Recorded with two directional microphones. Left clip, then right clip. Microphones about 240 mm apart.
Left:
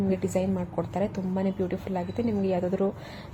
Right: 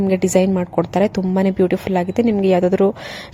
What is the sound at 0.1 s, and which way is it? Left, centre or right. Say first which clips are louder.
A woman's voice: right 14 dB; right.